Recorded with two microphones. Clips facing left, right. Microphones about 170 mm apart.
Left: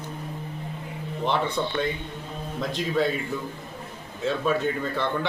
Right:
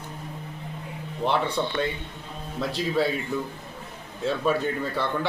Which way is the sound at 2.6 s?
5° right (ahead or behind).